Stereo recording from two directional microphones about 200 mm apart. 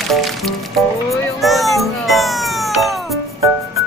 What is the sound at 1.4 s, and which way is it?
Music, centre (ahead or behind).